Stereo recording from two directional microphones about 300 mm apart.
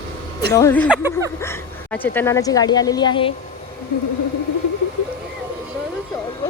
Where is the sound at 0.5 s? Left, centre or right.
Centre.